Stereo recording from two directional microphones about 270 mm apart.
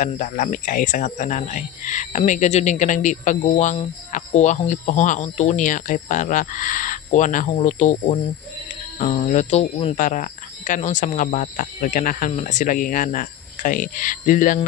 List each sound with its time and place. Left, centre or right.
0.0 s speech: left